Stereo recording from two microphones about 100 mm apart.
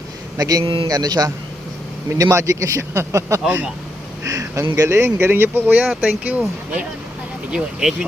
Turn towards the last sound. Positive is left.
turn(degrees=-5)  # may be behind; listen again after turning